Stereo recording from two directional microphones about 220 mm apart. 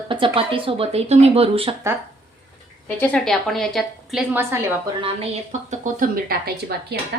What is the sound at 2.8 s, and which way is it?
A woman's voice, 5° left (ahead or behind).